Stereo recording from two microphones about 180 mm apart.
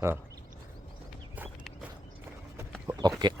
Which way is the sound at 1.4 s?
10° right (ahead or behind).